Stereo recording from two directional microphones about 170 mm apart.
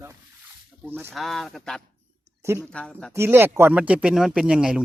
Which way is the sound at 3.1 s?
15° right (ahead or behind).